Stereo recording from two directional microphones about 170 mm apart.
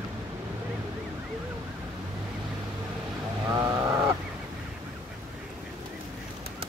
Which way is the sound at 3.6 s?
20° right (ahead or behind).